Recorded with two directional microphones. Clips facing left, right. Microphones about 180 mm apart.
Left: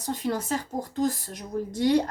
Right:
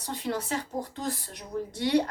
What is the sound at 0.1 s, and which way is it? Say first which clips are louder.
A woman's voice: left 3 dB; 45° left (ahead or behind).